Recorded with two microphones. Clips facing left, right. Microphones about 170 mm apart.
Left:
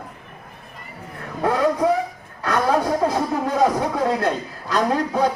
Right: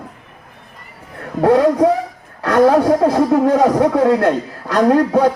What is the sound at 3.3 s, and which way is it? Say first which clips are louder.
Speech: right 10 dB; 80° right.